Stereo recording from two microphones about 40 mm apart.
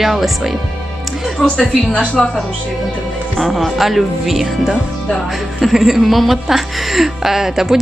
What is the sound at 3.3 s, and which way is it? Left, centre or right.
Speech, centre.